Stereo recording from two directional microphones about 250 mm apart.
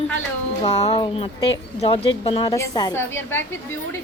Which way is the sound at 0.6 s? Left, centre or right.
Left.